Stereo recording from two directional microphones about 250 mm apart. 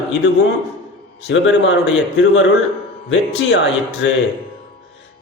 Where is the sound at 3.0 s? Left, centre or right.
Left.